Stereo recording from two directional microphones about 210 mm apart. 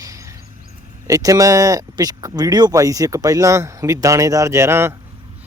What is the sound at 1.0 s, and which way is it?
A man's voice, 15° right (ahead or behind).